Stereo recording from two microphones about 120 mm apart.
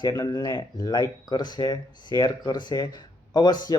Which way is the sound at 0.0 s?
30° left (ahead or behind).